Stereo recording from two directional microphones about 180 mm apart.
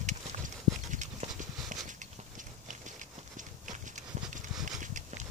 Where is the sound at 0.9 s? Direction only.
45° right (ahead or behind).